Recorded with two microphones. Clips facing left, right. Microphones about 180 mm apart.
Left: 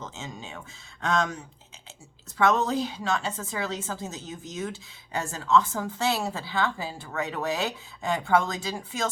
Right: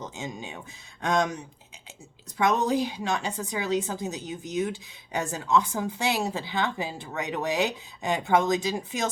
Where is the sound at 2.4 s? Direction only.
15° right (ahead or behind).